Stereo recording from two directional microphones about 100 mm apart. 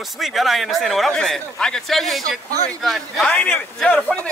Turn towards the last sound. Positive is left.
turn(degrees=15)  # may be behind; listen again after turning